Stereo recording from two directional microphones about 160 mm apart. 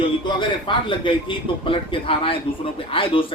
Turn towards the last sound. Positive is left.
turn(degrees=35)  # may be behind; listen again after turning